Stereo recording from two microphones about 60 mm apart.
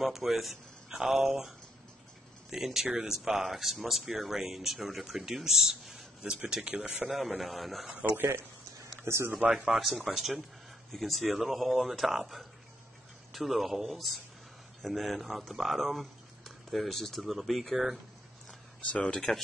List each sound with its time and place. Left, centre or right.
0.0 s speech: centre
2.5 s speech: centre
7.1 s speech: centre
9.0 s speech: right
9.7 s speech: centre
18.9 s speech: centre